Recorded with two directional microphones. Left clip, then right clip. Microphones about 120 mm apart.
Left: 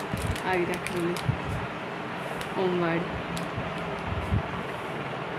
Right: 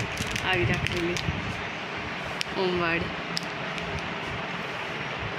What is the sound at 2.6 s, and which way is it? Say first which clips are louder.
Speech: right 1 dB; 5° right (ahead or behind).